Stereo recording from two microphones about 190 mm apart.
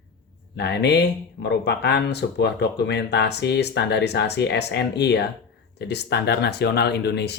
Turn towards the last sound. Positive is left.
turn(degrees=60)  # may be behind; listen again after turning